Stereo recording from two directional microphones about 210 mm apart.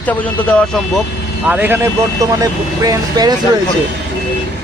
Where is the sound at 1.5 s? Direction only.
10° right (ahead or behind).